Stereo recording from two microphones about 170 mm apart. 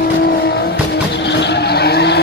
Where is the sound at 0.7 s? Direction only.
90° left; by 2.2 s 75° left (ahead or behind).